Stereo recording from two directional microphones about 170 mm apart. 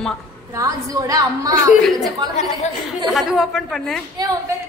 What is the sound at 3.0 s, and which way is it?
Speech, centre (ahead or behind).